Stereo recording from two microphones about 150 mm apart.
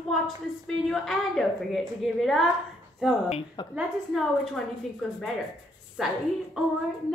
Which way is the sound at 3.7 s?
Centre (ahead or behind).